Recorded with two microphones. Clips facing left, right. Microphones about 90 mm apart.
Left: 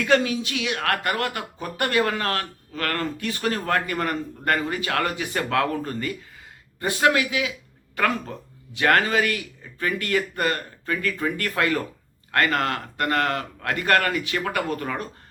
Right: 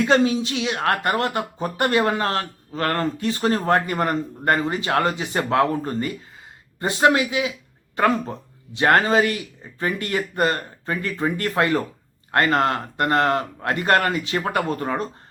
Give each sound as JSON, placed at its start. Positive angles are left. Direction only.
{"t": 0.0, "sound": "speech", "side_deg": -25}